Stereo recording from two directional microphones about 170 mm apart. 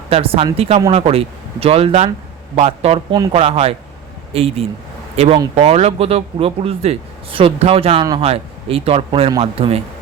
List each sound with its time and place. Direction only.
0.1 s speech: 35° right (ahead or behind)